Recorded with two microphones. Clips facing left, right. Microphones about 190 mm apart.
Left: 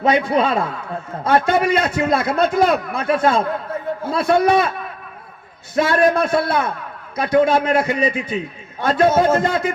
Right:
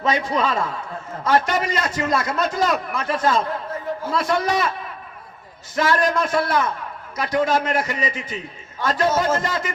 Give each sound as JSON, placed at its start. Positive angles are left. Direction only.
{"t": 0.1, "sound": "a man's voice", "side_deg": 60}
{"t": 5.8, "sound": "a man's voice", "side_deg": 60}